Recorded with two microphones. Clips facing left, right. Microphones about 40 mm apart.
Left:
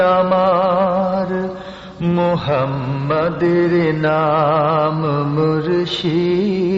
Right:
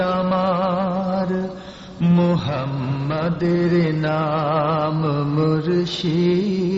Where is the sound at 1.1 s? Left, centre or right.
Centre.